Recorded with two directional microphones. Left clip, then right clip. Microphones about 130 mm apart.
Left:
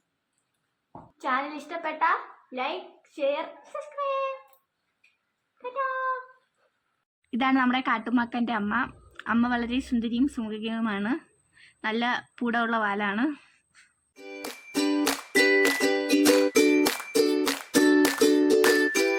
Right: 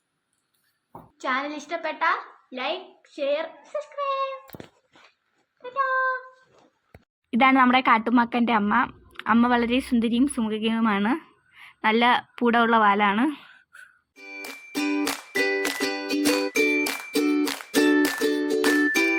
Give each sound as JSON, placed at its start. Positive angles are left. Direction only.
{"t": 1.2, "sound": "a child's voice", "side_deg": 20}
{"t": 5.6, "sound": "a sound", "side_deg": 15}
{"t": 7.3, "sound": "speech", "side_deg": -35}
{"t": 14.2, "sound": "music", "side_deg": 10}